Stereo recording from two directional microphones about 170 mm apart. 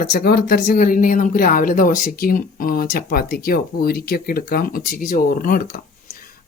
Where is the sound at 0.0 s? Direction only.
65° left (ahead or behind).